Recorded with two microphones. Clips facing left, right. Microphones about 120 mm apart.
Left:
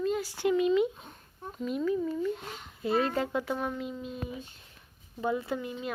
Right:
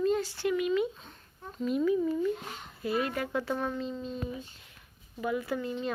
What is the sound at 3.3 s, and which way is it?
Speech, 15° left (ahead or behind).